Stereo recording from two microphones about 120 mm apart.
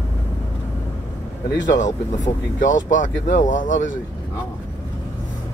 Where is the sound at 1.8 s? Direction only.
90° left.